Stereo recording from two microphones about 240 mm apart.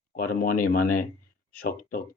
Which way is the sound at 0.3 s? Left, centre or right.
Left.